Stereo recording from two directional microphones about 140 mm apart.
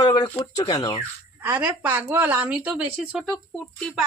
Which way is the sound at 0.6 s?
35° left (ahead or behind).